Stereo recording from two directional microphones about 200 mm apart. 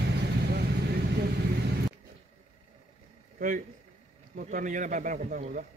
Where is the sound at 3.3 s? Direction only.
40° right (ahead or behind).